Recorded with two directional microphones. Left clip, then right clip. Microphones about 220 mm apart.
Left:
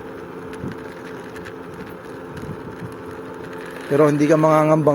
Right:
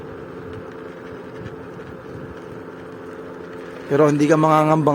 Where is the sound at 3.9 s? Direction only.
5° right (ahead or behind).